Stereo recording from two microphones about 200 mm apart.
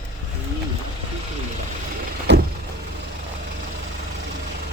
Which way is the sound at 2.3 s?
60° right (ahead or behind).